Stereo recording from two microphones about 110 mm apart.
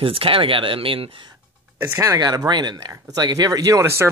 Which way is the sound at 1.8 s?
30° right (ahead or behind).